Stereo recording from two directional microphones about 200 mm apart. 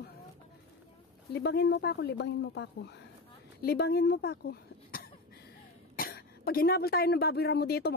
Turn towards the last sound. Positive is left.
turn(degrees=55)  # may be behind; listen again after turning